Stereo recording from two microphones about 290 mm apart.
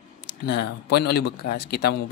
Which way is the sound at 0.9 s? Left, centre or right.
Left.